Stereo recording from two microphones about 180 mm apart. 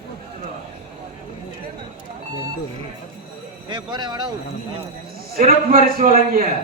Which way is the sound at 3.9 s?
25° right (ahead or behind).